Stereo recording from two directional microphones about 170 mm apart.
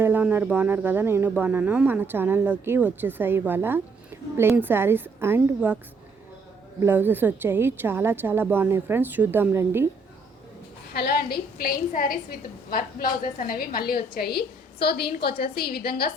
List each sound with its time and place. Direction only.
0.0 s speech: 10° right (ahead or behind)
6.8 s speech: 10° right (ahead or behind)
10.9 s a woman's voice: 65° left (ahead or behind)